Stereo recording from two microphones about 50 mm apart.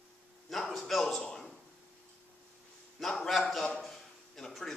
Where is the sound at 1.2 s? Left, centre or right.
Centre.